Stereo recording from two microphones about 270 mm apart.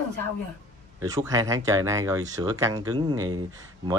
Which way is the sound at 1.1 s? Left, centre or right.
Centre.